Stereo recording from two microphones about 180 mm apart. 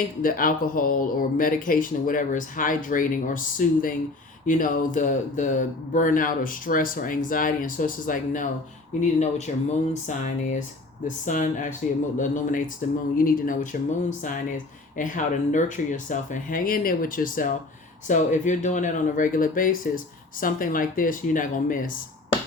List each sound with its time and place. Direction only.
0.2 s speech: 50° left (ahead or behind)